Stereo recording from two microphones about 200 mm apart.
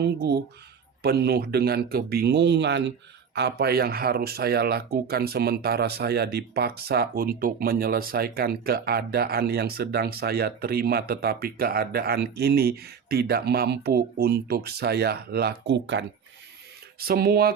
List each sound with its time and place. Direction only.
0.0 s speech: 55° right (ahead or behind)
17.0 s speech: 50° right (ahead or behind)